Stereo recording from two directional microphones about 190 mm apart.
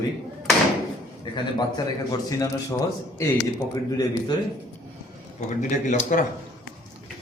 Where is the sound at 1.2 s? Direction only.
20° left (ahead or behind).